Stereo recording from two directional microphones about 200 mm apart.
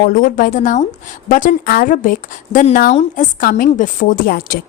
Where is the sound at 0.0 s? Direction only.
45° left (ahead or behind).